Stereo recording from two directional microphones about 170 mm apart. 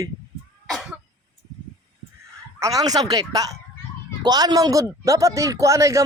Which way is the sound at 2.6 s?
20° right (ahead or behind).